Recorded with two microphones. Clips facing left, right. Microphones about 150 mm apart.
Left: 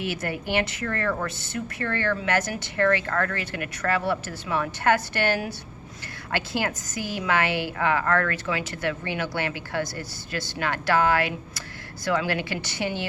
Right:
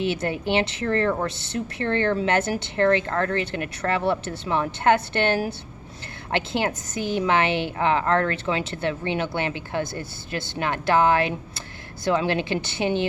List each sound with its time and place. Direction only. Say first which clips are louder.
0.0 s speech: right 5 dB; 25° right (ahead or behind)